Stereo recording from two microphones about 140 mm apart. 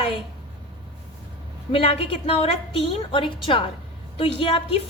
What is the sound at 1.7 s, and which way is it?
A woman's voice, 40° left (ahead or behind).